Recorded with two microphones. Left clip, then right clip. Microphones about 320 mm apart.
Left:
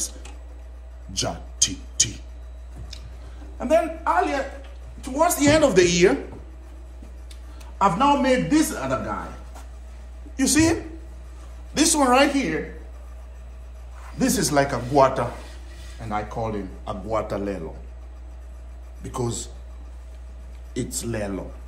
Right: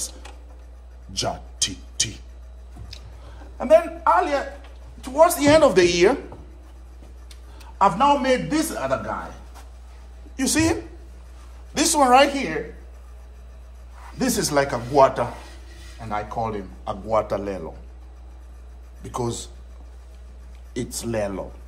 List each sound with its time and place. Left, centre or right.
1.1 s speech: centre
3.5 s a man's voice: centre
7.2 s a man's voice: centre
10.3 s a woman's voice: centre
14.1 s a man's voice: centre
19.0 s a man's voice: centre
20.7 s a man's voice: centre